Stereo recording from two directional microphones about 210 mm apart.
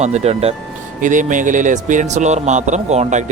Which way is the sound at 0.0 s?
30° right (ahead or behind).